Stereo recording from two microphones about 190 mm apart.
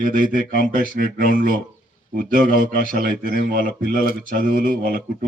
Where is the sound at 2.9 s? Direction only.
50° right (ahead or behind).